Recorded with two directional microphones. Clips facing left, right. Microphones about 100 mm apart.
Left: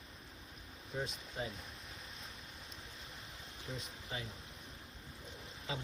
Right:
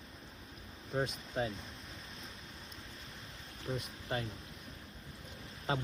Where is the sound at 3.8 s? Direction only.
55° right (ahead or behind).